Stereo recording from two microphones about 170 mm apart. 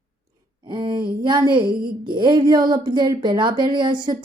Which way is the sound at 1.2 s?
25° right (ahead or behind).